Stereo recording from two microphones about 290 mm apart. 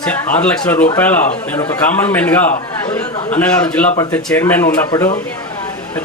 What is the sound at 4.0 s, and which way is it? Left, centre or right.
A man's voice, centre.